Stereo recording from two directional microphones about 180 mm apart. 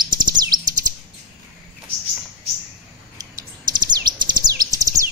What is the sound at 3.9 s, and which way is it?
Bird, 25° right (ahead or behind).